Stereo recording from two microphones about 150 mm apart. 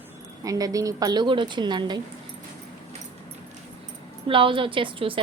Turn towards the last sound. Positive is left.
turn(degrees=-35)  # may be behind; listen again after turning